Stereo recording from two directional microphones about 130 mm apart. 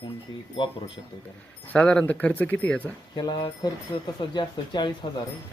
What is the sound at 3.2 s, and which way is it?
Speech, 35° left (ahead or behind).